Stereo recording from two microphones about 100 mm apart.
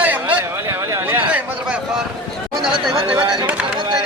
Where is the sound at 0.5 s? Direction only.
30° right (ahead or behind).